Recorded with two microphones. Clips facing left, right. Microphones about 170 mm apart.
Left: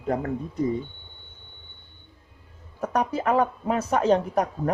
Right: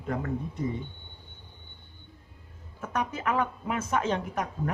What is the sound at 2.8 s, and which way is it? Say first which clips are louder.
Speech: left 6 dB; 35° left (ahead or behind).